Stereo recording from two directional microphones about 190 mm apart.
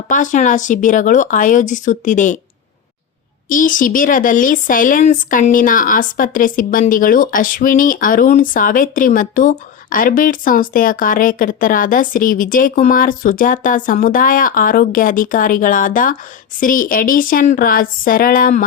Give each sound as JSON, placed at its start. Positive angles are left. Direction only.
{"t": 0.1, "sound": "speech", "side_deg": 40}
{"t": 3.5, "sound": "speech", "side_deg": 45}